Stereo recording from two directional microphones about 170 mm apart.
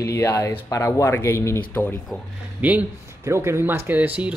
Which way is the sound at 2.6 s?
15° right (ahead or behind).